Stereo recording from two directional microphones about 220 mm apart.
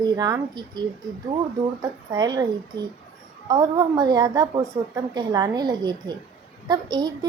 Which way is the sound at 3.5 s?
15° right (ahead or behind).